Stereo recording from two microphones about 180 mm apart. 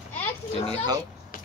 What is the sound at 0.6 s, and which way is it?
Speech, 25° right (ahead or behind).